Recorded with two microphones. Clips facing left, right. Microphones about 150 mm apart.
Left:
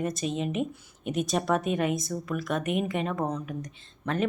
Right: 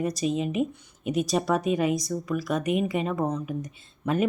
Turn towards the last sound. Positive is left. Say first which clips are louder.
# right 4 dB
turn(degrees=-5)  # may be behind; listen again after turning